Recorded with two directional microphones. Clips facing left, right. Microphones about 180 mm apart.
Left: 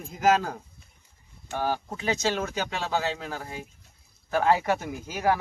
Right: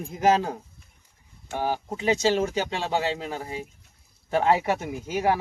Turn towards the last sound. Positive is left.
turn(degrees=-25)  # may be behind; listen again after turning